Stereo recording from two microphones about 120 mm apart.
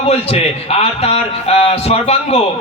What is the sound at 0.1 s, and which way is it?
A man's voice, 60° left (ahead or behind).